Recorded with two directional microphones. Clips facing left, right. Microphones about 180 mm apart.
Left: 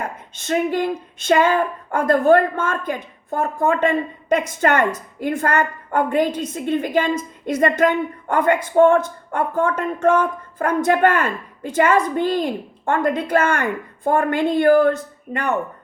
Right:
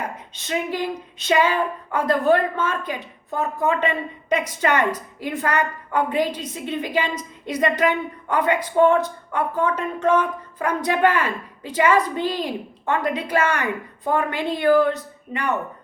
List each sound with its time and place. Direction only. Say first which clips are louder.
0.3 s a woman's voice: left 5 dB; 50° left (ahead or behind)